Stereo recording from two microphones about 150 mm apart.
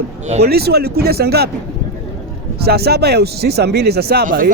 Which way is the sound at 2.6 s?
90° right.